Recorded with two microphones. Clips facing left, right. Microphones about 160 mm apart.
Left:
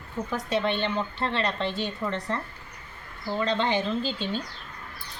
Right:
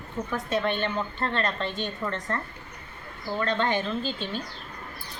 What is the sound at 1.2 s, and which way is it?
Speech, 10° left (ahead or behind).